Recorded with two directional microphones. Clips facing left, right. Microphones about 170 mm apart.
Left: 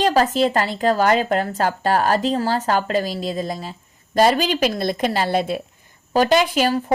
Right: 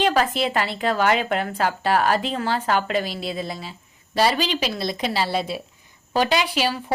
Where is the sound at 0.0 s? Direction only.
40° left (ahead or behind).